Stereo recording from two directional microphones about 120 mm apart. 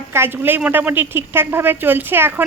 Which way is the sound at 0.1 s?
20° right (ahead or behind).